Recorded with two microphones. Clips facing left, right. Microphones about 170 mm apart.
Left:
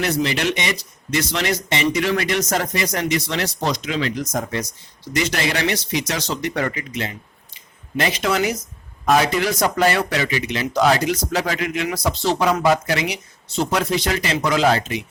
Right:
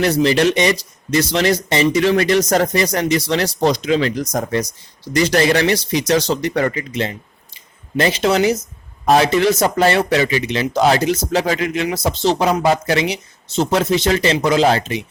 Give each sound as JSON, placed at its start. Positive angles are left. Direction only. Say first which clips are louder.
{"t": 0.0, "sound": "speech", "louder": "right 7 dB", "side_deg": -35}